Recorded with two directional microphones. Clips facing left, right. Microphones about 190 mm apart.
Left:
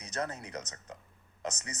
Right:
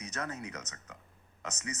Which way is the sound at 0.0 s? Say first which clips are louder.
Left 2 dB; 30° left (ahead or behind).